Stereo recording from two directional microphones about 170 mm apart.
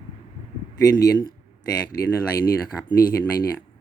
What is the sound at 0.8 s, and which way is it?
Speech, 20° left (ahead or behind).